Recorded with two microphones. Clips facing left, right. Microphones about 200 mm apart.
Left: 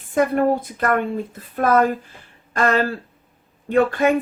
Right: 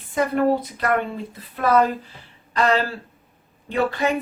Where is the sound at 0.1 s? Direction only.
50° left (ahead or behind).